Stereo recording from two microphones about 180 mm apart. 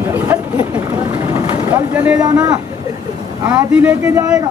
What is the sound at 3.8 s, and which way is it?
Speech, 10° right (ahead or behind).